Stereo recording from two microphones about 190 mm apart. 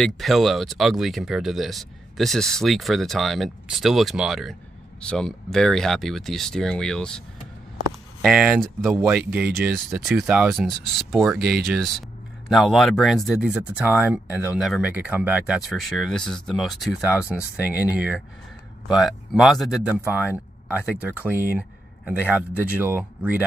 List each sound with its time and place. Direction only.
0.0 s speech: centre (ahead or behind)
8.2 s speech: 5° right (ahead or behind)
12.4 s speech: centre (ahead or behind)